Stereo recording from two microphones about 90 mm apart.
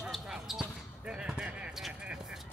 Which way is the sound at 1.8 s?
10° right (ahead or behind).